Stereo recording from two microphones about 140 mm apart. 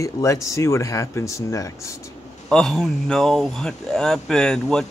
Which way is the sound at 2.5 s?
5° left (ahead or behind).